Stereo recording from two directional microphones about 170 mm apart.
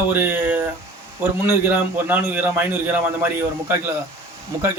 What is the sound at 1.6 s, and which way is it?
A man's voice, 10° right (ahead or behind).